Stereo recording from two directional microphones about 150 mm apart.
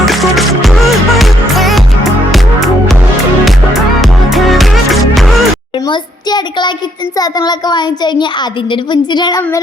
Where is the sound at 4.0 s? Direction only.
Centre (ahead or behind).